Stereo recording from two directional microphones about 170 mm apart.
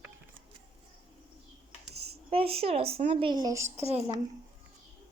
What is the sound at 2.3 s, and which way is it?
Child singing, 35° right (ahead or behind).